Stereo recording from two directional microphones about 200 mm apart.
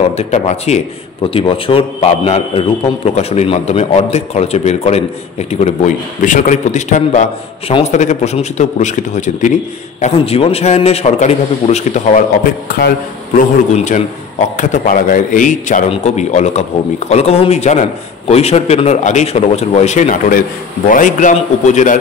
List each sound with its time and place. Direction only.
0.0 s a man's voice: 35° left (ahead or behind)